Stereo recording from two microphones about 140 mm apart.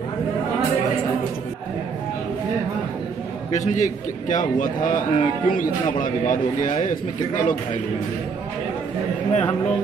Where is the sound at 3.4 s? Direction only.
60° left (ahead or behind).